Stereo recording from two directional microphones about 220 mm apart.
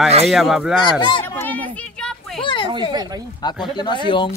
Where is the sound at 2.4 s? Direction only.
20° left (ahead or behind).